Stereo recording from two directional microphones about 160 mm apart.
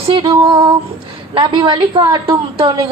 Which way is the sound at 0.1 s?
30° right (ahead or behind).